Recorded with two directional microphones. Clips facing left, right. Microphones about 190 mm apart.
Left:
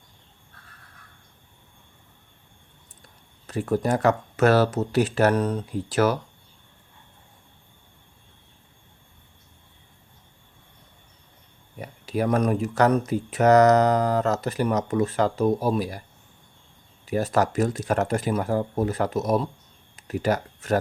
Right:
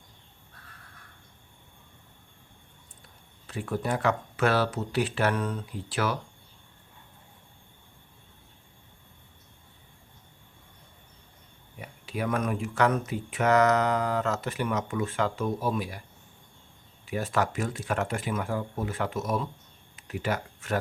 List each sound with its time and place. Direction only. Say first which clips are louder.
3.4 s speech: left 7 dB; 40° left (ahead or behind)
11.8 s speech: left 7 dB; 40° left (ahead or behind)
17.1 s speech: left 5 dB; 40° left (ahead or behind)